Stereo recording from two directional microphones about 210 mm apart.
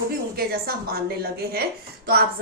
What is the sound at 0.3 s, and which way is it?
Speech, 45° right (ahead or behind).